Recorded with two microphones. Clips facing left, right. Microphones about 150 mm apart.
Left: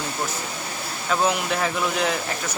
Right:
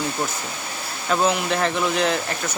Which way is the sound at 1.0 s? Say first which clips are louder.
Right 2 dB; centre (ahead or behind).